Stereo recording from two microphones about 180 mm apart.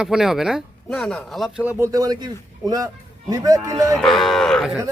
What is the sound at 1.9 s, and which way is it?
A man's voice, 20° right (ahead or behind).